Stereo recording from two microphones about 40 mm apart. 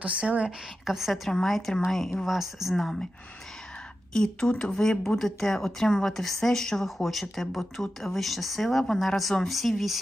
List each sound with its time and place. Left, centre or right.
0.0 s speech: right
0.9 s a woman's voice: centre
1.3 s a woman's voice: centre
2.7 s a woman's voice: centre
4.1 s a woman's voice: centre